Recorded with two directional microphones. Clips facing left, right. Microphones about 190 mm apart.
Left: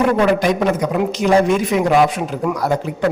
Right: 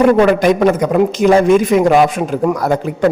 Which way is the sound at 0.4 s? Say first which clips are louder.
Right 5 dB; 50° right (ahead or behind).